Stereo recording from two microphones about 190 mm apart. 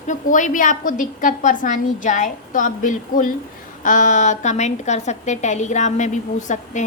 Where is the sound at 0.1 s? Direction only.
40° left (ahead or behind).